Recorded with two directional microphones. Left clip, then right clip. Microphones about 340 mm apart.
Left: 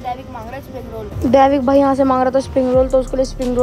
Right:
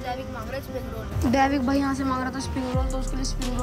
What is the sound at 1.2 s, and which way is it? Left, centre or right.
Speech, centre.